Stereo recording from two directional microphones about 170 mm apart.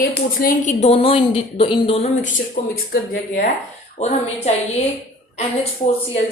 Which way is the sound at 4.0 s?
40° left (ahead or behind).